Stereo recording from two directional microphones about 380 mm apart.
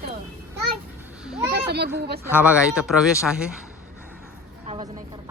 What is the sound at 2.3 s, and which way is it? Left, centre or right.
A man's voice, centre.